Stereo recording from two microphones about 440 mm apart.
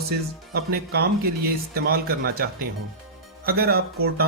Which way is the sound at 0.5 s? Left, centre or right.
Right.